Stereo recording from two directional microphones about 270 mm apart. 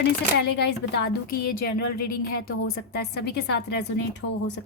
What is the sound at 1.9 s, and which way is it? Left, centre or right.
Speech, left.